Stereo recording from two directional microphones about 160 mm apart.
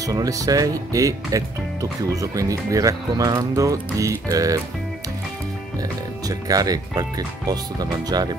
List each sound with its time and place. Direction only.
0.0 s speech: 20° right (ahead or behind)
6.2 s speech: 25° right (ahead or behind)